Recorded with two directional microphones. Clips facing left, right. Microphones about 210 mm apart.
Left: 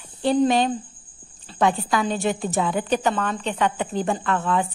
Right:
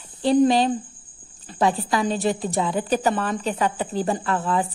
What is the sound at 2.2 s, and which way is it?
Speech, 35° right (ahead or behind).